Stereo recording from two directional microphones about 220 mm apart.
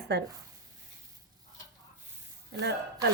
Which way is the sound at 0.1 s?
50° right (ahead or behind).